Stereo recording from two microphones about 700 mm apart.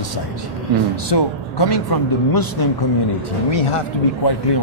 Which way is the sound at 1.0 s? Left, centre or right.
Left.